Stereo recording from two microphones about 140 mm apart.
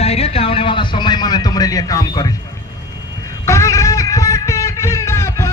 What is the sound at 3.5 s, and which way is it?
Music, 20° left (ahead or behind).